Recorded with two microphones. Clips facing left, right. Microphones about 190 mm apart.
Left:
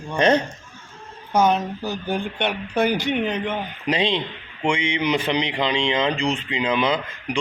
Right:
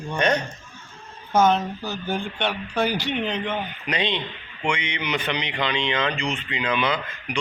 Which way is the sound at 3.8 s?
30° left (ahead or behind).